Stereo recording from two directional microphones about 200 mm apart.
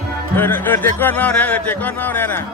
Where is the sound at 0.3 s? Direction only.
10° left (ahead or behind).